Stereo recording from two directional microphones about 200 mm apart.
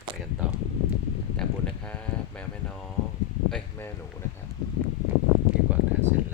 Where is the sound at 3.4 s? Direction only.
5° left (ahead or behind).